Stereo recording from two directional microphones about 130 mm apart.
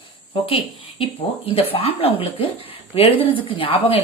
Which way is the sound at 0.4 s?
45° left (ahead or behind).